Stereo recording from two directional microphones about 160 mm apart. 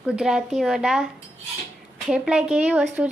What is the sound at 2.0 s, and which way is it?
Speech, 5° right (ahead or behind).